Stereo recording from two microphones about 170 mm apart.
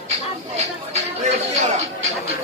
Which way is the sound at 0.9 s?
45° right (ahead or behind).